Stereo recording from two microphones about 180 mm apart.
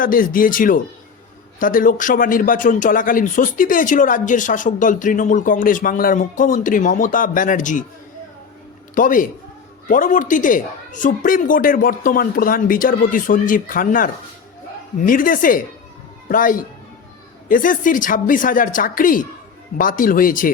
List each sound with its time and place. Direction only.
0.0 s speech: 50° left (ahead or behind)
9.0 s speech: 50° left (ahead or behind)